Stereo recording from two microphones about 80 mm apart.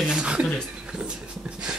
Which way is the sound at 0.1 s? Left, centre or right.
Centre.